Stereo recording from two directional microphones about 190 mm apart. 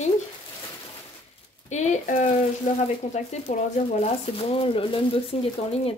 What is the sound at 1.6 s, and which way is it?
Speech, 35° left (ahead or behind).